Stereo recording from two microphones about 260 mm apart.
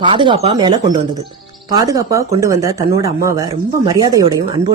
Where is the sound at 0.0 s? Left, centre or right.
Centre.